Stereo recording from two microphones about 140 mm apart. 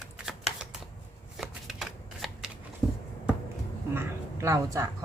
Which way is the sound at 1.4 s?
Centre (ahead or behind).